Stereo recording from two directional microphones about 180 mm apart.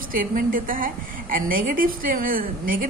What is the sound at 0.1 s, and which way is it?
A woman's voice, 50° right (ahead or behind).